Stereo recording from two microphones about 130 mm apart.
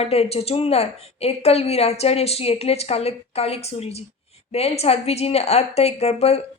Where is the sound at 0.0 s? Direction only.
50° left (ahead or behind).